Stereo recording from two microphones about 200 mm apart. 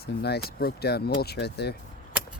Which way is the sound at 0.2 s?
55° left (ahead or behind).